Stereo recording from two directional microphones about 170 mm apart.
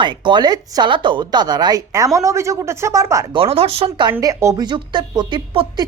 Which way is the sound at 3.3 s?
35° right (ahead or behind).